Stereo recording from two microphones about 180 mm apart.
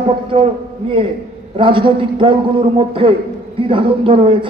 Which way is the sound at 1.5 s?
30° right (ahead or behind).